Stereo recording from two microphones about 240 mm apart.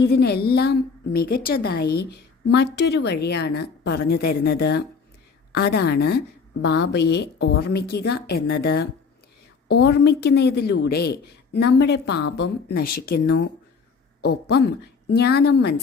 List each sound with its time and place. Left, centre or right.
0.0 s a woman's voice: left